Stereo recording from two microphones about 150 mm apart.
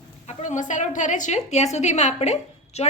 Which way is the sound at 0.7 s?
55° left (ahead or behind).